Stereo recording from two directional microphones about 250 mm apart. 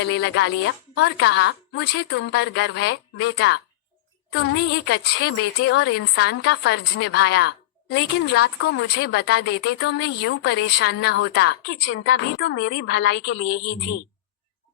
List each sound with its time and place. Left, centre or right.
0.0 s speech: left
8.5 s speech: left
9.0 s a woman's voice: left